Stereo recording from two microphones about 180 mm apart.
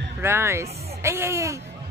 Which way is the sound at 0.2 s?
15° right (ahead or behind).